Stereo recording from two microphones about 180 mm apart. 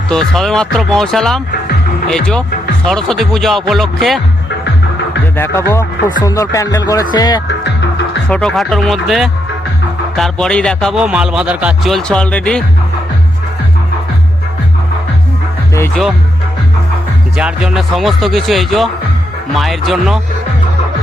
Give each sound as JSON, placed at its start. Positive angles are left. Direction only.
{"t": 0.3, "sound": "speech", "side_deg": 0}
{"t": 5.4, "sound": "speech", "side_deg": 15}
{"t": 6.0, "sound": "speech", "side_deg": 50}
{"t": 6.2, "sound": "speech", "side_deg": 20}
{"t": 7.4, "sound": "music", "side_deg": 75}
{"t": 8.3, "sound": "speech", "side_deg": 5}
{"t": 17.3, "sound": "speech", "side_deg": -5}